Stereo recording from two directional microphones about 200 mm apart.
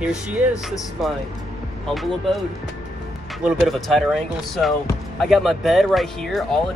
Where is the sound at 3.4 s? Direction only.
Centre (ahead or behind).